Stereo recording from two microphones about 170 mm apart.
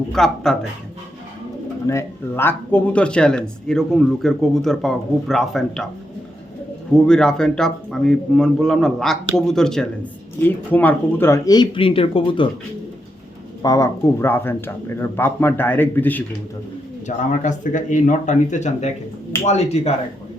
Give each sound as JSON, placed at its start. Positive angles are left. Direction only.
{"t": 0.1, "sound": "speech", "side_deg": 0}
{"t": 1.9, "sound": "speech", "side_deg": 15}
{"t": 6.9, "sound": "speech", "side_deg": 5}
{"t": 13.6, "sound": "a man's voice", "side_deg": 20}
{"t": 17.1, "sound": "speech", "side_deg": 45}